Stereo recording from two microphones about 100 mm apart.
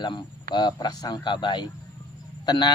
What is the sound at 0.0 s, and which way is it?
A man's voice, 50° left (ahead or behind).